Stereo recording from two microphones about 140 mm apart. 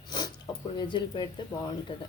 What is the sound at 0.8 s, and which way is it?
Speech, 35° left (ahead or behind).